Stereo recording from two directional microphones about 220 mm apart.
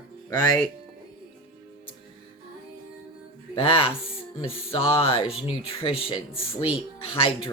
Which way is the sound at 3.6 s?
25° left (ahead or behind).